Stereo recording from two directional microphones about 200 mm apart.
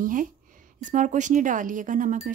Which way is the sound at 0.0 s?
40° right (ahead or behind).